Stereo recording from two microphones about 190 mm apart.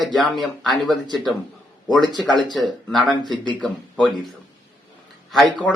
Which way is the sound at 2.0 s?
25° right (ahead or behind).